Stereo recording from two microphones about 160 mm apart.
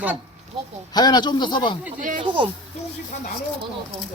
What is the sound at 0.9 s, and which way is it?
Speech, 25° left (ahead or behind).